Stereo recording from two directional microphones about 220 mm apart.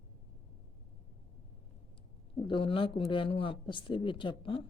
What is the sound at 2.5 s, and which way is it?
Speech, 25° left (ahead or behind).